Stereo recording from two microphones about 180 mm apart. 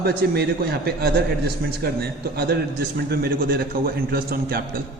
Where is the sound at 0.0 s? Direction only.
60° right (ahead or behind).